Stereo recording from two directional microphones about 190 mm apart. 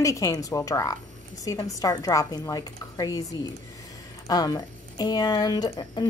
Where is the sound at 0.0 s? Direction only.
15° left (ahead or behind).